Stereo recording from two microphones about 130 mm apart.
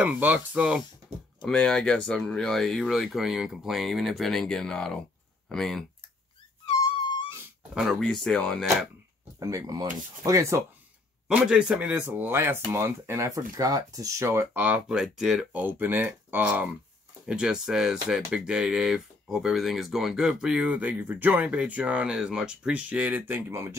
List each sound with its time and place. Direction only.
0.0 s speech: 10° right (ahead or behind)
1.4 s speech: 5° left (ahead or behind)
7.7 s speech: 5° right (ahead or behind)
9.4 s speech: 25° right (ahead or behind)
11.2 s speech: 5° right (ahead or behind)
15.6 s speech: 15° right (ahead or behind)